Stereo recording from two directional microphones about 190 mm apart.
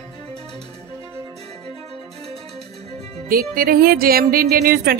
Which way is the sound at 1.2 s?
35° right (ahead or behind).